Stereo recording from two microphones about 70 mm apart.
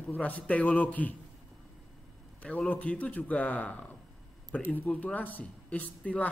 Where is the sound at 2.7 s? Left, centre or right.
Centre.